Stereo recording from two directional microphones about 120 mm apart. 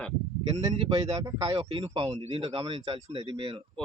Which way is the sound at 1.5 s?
50° right (ahead or behind).